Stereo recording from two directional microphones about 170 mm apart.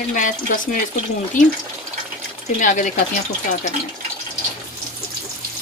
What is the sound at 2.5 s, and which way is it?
Speech, 50° left (ahead or behind).